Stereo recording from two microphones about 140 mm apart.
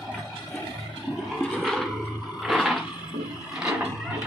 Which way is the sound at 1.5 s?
Centre (ahead or behind).